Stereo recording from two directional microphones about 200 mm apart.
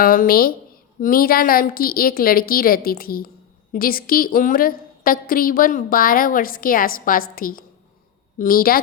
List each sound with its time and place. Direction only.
0.0 s a woman's voice: 45° left (ahead or behind)